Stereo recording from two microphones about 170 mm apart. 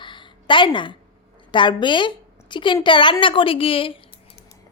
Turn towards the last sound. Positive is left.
turn(degrees=30)  # may be behind; listen again after turning